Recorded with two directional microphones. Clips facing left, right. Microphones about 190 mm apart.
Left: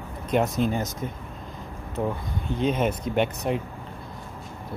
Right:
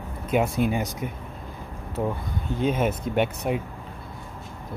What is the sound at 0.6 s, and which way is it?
Speech, 10° right (ahead or behind).